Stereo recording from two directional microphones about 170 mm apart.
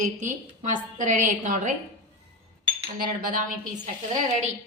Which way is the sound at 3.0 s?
60° right (ahead or behind).